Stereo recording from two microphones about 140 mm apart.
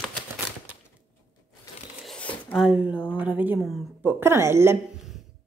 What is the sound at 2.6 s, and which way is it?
A woman's voice, 5° right (ahead or behind).